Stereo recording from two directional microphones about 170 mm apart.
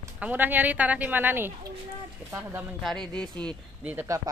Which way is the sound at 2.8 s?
5° left (ahead or behind).